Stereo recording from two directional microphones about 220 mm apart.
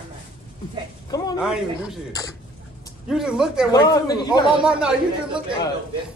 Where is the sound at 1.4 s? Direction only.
5° right (ahead or behind).